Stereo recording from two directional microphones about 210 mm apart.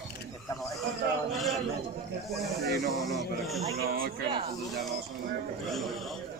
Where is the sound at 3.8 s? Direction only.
45° right (ahead or behind).